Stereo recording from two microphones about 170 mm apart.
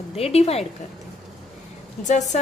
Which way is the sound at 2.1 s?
45° left (ahead or behind).